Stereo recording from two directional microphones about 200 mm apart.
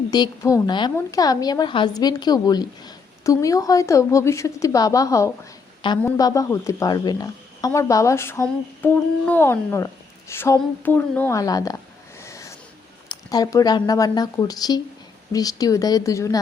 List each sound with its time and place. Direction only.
0.1 s speech: 20° left (ahead or behind)
12.2 s a sound: 15° left (ahead or behind)
13.1 s speech: 20° left (ahead or behind)